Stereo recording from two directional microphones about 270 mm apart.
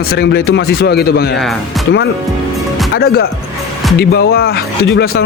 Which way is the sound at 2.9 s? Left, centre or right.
Left.